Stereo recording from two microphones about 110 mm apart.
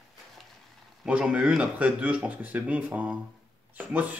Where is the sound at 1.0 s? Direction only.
10° right (ahead or behind).